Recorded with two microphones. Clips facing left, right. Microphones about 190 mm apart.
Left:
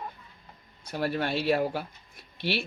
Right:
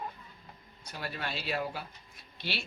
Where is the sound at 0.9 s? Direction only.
60° left (ahead or behind).